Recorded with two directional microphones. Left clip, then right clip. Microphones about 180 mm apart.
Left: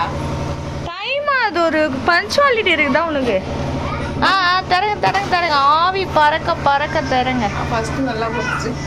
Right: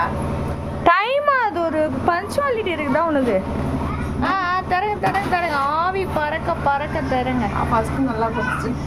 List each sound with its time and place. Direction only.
1.1 s a sound: 20° right (ahead or behind)
1.5 s a woman's voice: centre (ahead or behind)
3.0 s a woman's voice: 10° right (ahead or behind)